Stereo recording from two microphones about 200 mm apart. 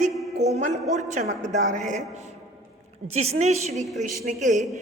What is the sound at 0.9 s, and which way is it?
A woman's voice, 35° right (ahead or behind).